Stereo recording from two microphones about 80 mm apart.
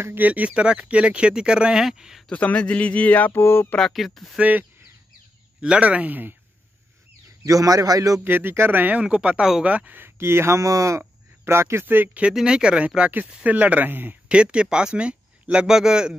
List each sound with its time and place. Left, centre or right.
0.0 s speech: right; by 2.2 s centre
2.2 s speech: centre
3.7 s speech: centre
4.4 s speech: right
7.4 s a man's voice: right
8.2 s speech: right
11.0 s a sound: right
11.8 s speech: right
14.3 s speech: centre